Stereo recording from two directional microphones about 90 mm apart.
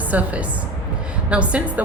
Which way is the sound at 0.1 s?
15° right (ahead or behind).